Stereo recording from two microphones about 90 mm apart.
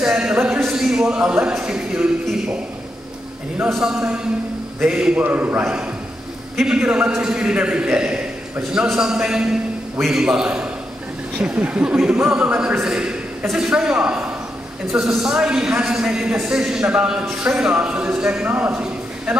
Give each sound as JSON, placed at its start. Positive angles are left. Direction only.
{"t": 0.0, "sound": "speech", "side_deg": -10}
{"t": 3.7, "sound": "a man's voice", "side_deg": -10}
{"t": 6.5, "sound": "a man's voice", "side_deg": -10}